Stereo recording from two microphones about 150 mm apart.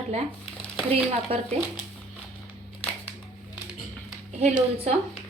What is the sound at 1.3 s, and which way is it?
Speech, 40° right (ahead or behind).